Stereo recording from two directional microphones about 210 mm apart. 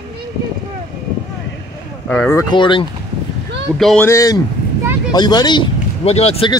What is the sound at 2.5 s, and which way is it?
Speech, 20° left (ahead or behind).